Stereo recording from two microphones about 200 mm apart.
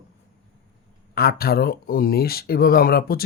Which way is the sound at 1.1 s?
50° left (ahead or behind).